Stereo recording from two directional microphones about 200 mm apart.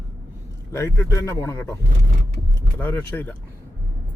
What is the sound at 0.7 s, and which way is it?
Speech, 15° left (ahead or behind).